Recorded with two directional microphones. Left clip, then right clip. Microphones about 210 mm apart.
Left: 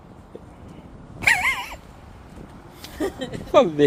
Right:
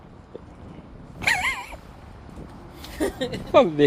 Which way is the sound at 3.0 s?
45° right (ahead or behind).